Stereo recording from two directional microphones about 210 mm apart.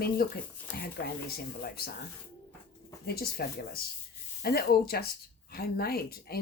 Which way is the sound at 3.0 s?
45° left (ahead or behind).